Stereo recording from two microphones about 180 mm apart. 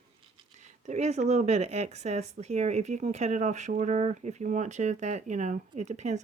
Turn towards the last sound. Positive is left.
turn(degrees=-40)  # may be behind; listen again after turning